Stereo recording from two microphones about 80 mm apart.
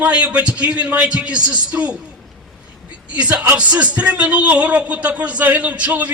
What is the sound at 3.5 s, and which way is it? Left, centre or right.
Speech, centre.